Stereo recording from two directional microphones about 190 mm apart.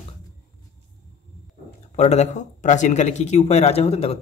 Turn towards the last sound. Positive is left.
turn(degrees=35)  # may be behind; listen again after turning